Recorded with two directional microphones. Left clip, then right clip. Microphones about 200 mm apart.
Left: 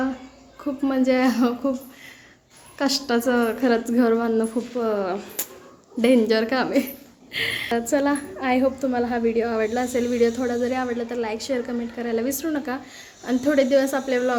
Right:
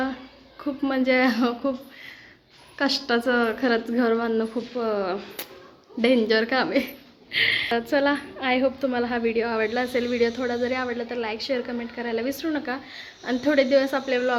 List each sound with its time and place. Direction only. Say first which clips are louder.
0.6 s a woman's voice: left 2 dB; 5° left (ahead or behind)
2.7 s a woman's voice: left 1 dB; 5° left (ahead or behind)